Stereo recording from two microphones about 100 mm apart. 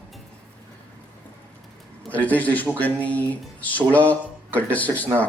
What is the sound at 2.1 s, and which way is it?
A man's voice, 15° left (ahead or behind).